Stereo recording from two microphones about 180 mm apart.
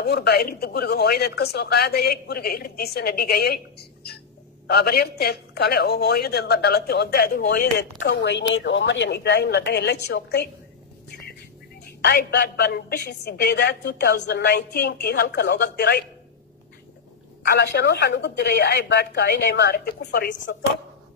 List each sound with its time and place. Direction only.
0.0 s speech: 65° left (ahead or behind)
8.0 s a woman's voice: 75° left (ahead or behind)
12.0 s speech: 60° left (ahead or behind)
17.4 s a woman's voice: 65° left (ahead or behind)